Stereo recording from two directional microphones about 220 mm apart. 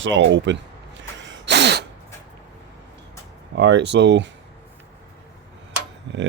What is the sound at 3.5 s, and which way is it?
Speech, 50° right (ahead or behind).